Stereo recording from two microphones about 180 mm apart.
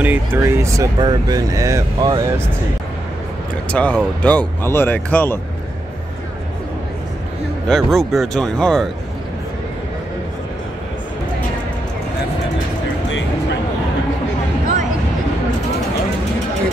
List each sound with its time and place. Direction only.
0.0 s speech: 10° right (ahead or behind)
3.7 s speech: 5° left (ahead or behind)
7.6 s speech: centre (ahead or behind)